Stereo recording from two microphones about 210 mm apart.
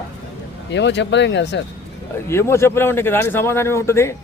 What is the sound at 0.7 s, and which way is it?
Speech, 55° left (ahead or behind).